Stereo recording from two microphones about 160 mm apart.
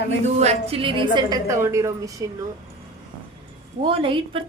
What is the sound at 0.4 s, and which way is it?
A woman's voice, 35° right (ahead or behind).